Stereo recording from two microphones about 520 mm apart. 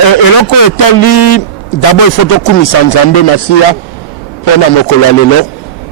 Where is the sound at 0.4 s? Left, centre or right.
Left.